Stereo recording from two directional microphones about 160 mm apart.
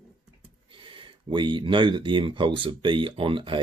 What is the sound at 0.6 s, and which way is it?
Speech, 35° right (ahead or behind).